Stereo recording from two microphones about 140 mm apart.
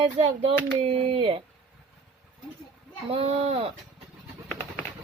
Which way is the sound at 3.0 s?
45° right (ahead or behind).